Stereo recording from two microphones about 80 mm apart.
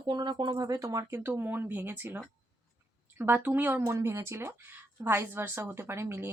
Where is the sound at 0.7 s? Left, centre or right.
Right.